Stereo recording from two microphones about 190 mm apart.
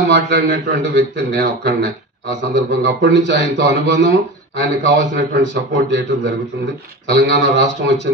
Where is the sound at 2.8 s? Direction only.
60° right (ahead or behind).